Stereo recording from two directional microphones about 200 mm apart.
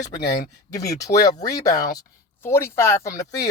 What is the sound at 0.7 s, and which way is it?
Speech, 15° left (ahead or behind).